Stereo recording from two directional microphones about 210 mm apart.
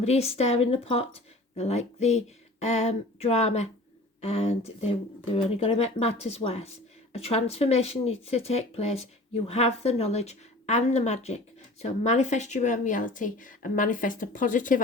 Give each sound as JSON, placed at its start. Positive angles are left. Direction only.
{"t": 0.0, "sound": "speech", "side_deg": 30}